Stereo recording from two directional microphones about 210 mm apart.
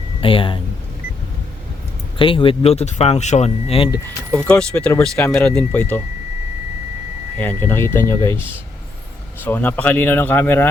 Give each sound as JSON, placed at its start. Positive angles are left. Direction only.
{"t": 0.2, "sound": "a sound", "side_deg": 25}
{"t": 2.1, "sound": "speech", "side_deg": 25}
{"t": 4.4, "sound": "speech", "side_deg": 5}
{"t": 7.3, "sound": "speech", "side_deg": 10}